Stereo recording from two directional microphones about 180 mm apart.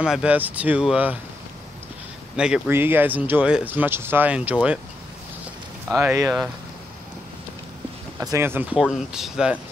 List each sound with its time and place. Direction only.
0.0 s speech: 5° right (ahead or behind)
2.3 s speech: 5° right (ahead or behind)
5.9 s speech: 15° right (ahead or behind)
8.2 s speech: 15° right (ahead or behind)